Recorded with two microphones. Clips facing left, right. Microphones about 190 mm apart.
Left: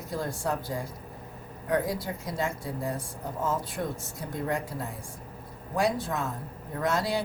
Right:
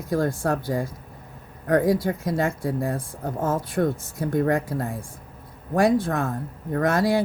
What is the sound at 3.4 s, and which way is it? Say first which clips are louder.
Speech: right 7 dB; 55° right (ahead or behind).